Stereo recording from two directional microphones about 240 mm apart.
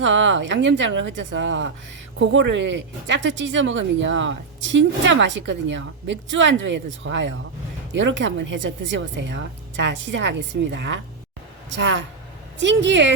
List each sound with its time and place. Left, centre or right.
0.0 s speech: right